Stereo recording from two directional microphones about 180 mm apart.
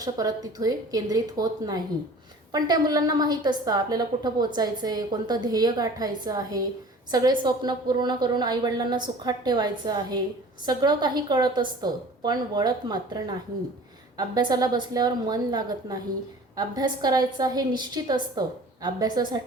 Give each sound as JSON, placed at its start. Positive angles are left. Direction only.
{"t": 0.0, "sound": "a woman's voice", "side_deg": -20}